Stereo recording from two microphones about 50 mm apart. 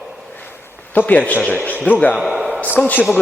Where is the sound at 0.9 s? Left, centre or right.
Left.